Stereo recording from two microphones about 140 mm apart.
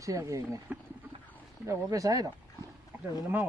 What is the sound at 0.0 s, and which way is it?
Speech, 25° right (ahead or behind).